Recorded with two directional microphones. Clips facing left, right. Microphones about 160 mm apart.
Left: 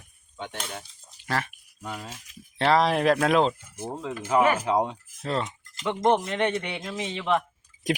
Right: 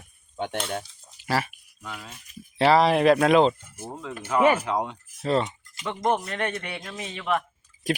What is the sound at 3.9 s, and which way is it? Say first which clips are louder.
Speech: left 2 dB; 30° left (ahead or behind).